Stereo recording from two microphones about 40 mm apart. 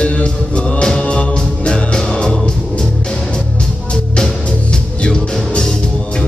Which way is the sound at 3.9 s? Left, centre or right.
Centre.